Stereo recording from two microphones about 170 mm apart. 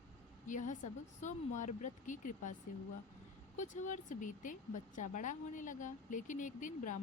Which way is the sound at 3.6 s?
45° left (ahead or behind).